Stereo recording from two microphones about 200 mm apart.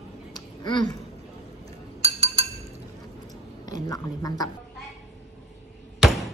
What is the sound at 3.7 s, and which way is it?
Speech, 20° left (ahead or behind).